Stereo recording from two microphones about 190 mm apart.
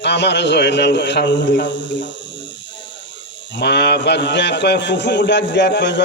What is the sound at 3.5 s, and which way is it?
A man's voice, 65° left (ahead or behind).